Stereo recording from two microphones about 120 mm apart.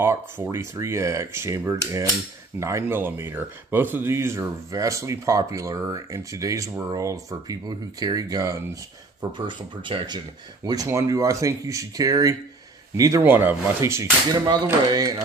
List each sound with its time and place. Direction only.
0.0 s speech: 20° right (ahead or behind)
9.5 s speech: 45° right (ahead or behind)
13.2 s speech: 15° right (ahead or behind)
14.4 s speech: 35° right (ahead or behind)